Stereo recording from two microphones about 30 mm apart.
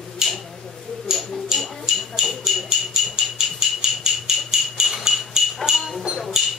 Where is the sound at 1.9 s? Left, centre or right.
Centre.